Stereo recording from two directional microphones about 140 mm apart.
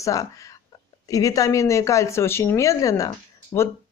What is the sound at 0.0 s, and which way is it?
A woman's voice, 25° left (ahead or behind).